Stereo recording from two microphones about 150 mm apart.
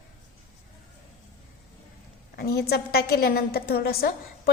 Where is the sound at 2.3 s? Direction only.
90° left.